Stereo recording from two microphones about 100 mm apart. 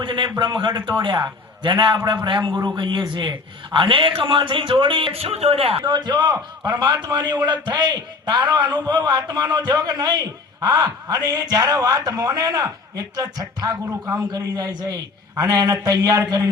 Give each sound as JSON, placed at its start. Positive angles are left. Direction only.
{"t": 0.0, "sound": "a man's voice", "side_deg": -55}
{"t": 5.8, "sound": "a man's voice", "side_deg": -50}